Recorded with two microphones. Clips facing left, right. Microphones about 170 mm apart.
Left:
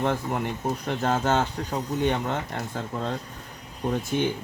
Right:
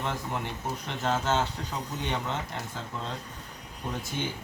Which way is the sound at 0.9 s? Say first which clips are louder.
Left 4 dB; 50° left (ahead or behind).